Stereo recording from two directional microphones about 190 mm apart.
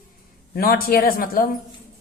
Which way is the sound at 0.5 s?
50° left (ahead or behind).